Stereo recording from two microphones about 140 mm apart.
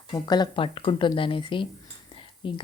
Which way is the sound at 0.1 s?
30° left (ahead or behind).